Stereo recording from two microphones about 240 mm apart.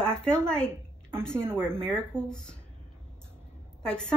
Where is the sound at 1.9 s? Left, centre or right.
Centre.